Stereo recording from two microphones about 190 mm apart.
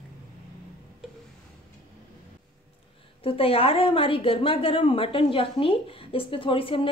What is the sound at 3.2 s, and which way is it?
A woman's voice, 30° left (ahead or behind).